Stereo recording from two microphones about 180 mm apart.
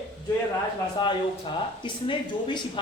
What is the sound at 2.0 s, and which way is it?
Speech, 25° left (ahead or behind).